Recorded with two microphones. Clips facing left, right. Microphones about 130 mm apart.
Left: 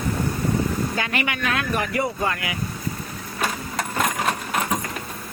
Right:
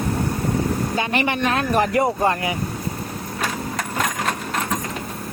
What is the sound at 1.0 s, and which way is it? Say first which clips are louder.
Speech: right 4 dB; 30° right (ahead or behind).